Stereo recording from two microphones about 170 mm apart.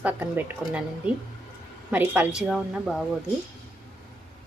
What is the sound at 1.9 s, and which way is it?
A woman's voice, 10° right (ahead or behind).